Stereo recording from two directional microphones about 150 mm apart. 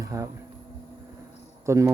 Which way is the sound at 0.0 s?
20° right (ahead or behind).